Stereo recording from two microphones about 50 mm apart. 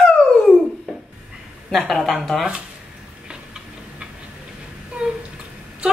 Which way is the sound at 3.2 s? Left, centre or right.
Centre.